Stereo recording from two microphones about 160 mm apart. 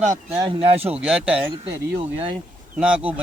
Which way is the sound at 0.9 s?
5° right (ahead or behind).